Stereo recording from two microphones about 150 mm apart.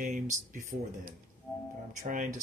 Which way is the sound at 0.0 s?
60° right (ahead or behind).